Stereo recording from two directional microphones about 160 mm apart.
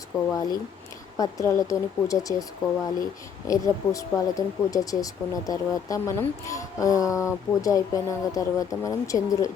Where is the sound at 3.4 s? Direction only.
20° left (ahead or behind).